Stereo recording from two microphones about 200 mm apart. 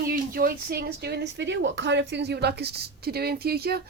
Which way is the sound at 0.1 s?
50° right (ahead or behind).